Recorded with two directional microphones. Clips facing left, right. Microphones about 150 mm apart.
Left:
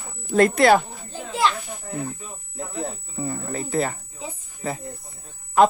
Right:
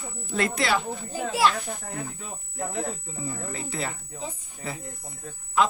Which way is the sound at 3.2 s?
45° left (ahead or behind).